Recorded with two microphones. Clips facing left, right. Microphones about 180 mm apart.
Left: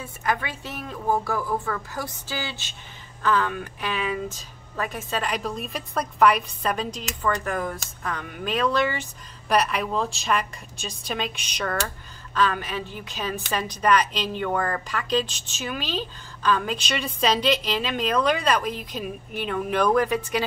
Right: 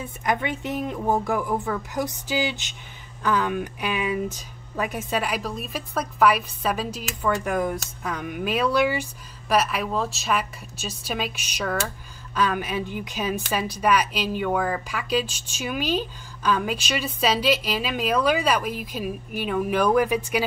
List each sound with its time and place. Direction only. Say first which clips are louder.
0.0 s a woman's voice: right 2 dB; 20° right (ahead or behind)